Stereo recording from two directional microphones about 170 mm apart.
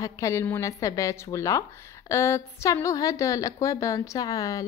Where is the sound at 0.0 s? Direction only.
20° left (ahead or behind).